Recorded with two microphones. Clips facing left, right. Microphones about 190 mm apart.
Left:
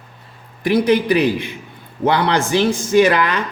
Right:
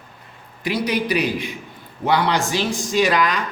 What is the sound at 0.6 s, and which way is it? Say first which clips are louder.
A man's voice: left 7 dB; 55° left (ahead or behind).